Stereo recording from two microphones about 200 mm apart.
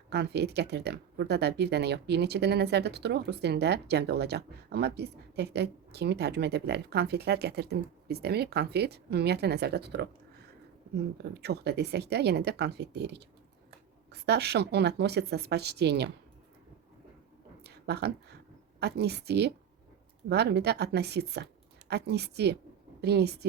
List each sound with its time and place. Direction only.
0.1 s speech: 55° right (ahead or behind)
17.6 s a sound: 55° right (ahead or behind)
18.8 s speech: 55° right (ahead or behind)